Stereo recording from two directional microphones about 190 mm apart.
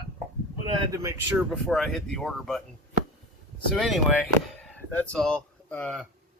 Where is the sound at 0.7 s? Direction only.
20° right (ahead or behind).